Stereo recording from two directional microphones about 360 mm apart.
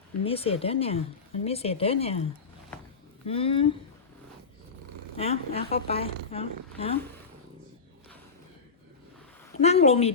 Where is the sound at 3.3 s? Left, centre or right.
Centre.